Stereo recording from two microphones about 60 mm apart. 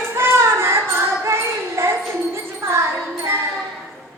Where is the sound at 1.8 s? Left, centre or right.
Right.